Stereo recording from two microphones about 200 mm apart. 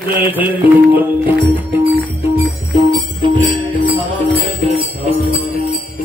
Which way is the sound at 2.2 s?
15° right (ahead or behind).